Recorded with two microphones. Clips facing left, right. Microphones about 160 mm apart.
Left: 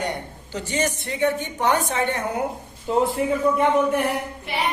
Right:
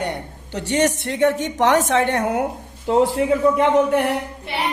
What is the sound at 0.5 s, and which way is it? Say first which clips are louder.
A woman's voice: right 6 dB; 70° right (ahead or behind).